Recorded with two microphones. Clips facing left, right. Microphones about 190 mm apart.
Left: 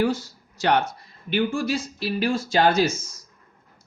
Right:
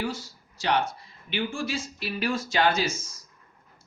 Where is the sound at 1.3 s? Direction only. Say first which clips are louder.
Left 7 dB; 40° left (ahead or behind).